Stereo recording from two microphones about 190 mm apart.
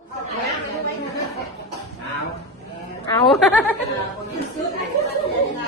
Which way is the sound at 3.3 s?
5° left (ahead or behind).